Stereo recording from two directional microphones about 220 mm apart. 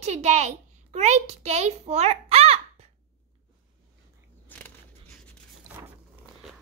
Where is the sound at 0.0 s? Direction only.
30° right (ahead or behind).